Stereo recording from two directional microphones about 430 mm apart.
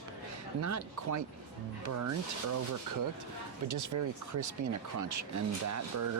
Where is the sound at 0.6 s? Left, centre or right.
Right.